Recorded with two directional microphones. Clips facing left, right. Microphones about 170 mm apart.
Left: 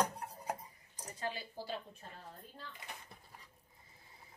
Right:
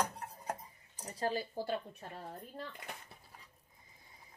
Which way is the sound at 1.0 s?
35° right (ahead or behind).